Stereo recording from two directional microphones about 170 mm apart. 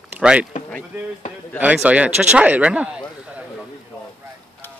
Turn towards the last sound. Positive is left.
turn(degrees=-10)  # may be behind; listen again after turning